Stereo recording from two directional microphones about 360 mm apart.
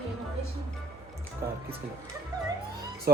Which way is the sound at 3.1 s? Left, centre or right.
Right.